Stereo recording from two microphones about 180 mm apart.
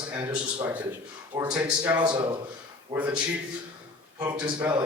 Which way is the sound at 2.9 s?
10° right (ahead or behind).